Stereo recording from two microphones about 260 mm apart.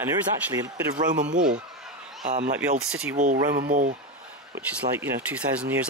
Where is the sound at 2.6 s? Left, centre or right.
Centre.